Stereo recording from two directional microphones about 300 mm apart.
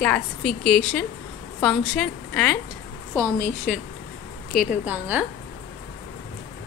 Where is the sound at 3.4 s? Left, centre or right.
Left.